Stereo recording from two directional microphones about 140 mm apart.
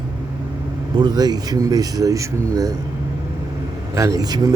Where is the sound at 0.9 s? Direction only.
30° right (ahead or behind).